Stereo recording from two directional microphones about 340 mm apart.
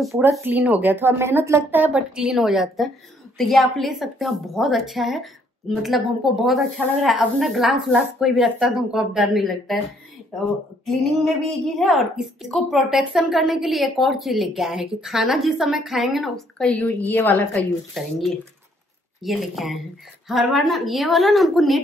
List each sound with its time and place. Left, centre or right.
0.0 s a woman's voice: centre
10.9 s a woman's voice: centre
19.2 s a woman's voice: centre